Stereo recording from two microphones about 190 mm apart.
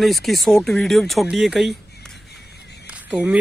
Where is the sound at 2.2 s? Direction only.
60° left (ahead or behind).